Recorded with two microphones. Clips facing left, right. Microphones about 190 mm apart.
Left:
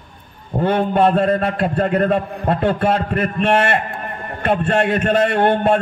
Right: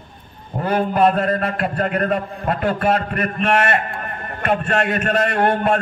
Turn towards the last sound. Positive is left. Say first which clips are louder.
# left 2 dB
turn(degrees=30)  # may be behind; listen again after turning